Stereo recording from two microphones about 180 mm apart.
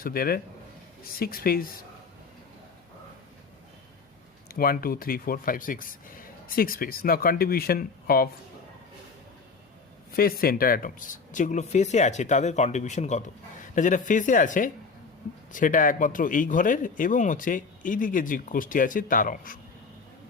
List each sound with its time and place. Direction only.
0.0 s speech: 55° left (ahead or behind)
4.4 s speech: 55° left (ahead or behind)
10.2 s speech: 55° left (ahead or behind)